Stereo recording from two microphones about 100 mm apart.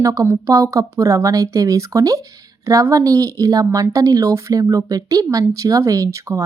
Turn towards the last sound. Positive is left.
turn(degrees=-30)  # may be behind; listen again after turning